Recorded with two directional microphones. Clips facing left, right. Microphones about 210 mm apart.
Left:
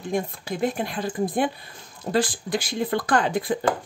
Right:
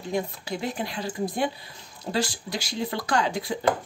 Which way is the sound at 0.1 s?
50° left (ahead or behind).